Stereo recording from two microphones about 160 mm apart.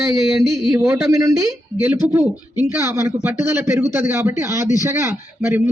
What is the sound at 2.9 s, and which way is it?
A man's voice, 15° right (ahead or behind).